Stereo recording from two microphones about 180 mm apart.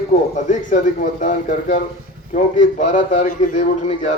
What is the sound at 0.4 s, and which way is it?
Speech, 45° left (ahead or behind).